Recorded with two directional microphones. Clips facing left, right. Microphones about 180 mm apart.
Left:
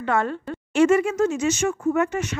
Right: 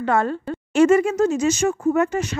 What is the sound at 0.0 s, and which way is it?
Speech, 35° right (ahead or behind).